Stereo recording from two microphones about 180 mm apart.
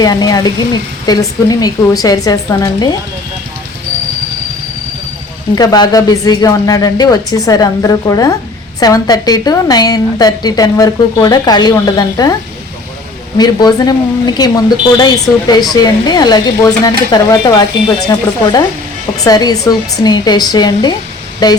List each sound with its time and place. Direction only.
0.0 s a woman's voice: 20° left (ahead or behind)
5.5 s a woman's voice: 20° left (ahead or behind)
13.3 s a woman's voice: 20° left (ahead or behind)
19.1 s a woman's voice: 20° left (ahead or behind)